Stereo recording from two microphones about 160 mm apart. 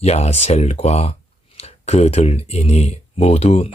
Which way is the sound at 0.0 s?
40° left (ahead or behind).